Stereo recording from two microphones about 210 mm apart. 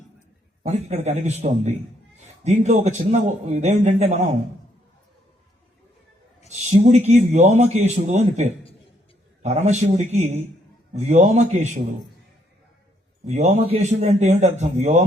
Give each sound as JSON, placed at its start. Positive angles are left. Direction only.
{"t": 0.6, "sound": "a man's voice", "side_deg": -30}
{"t": 6.5, "sound": "a man's voice", "side_deg": -30}
{"t": 13.2, "sound": "a man's voice", "side_deg": -35}